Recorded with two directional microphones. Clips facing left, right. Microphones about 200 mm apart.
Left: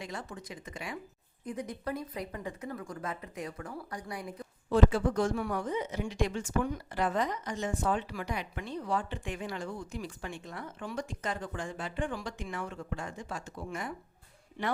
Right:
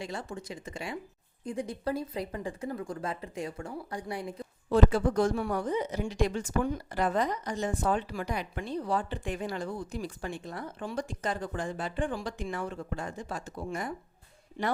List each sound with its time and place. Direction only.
0.0 s speech: 30° right (ahead or behind)
4.9 s a woman's voice: 40° right (ahead or behind)